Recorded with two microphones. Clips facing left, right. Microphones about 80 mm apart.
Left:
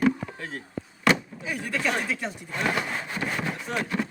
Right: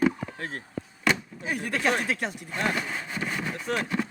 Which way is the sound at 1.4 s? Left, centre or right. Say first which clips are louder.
Right 1 dB; right.